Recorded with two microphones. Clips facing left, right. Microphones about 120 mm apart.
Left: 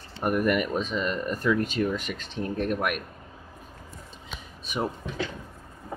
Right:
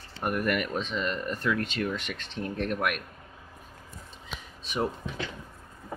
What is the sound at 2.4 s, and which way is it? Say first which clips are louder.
Speech: left 3 dB; 45° left (ahead or behind).